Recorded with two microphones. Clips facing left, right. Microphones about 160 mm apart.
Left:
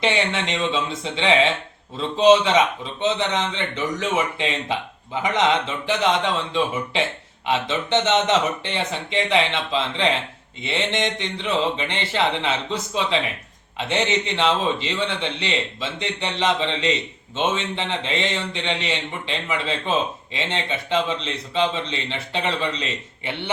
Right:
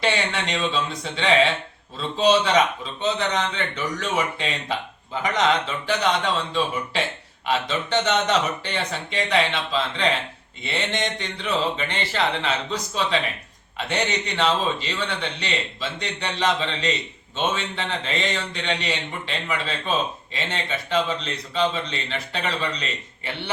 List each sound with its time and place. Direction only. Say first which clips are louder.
0.0 s speech: left 2 dB; 20° left (ahead or behind)